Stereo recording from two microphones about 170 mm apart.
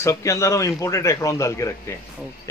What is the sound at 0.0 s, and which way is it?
A man's voice, 20° left (ahead or behind).